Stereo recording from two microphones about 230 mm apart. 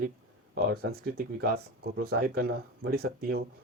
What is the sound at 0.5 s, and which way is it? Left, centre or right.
Speech, right.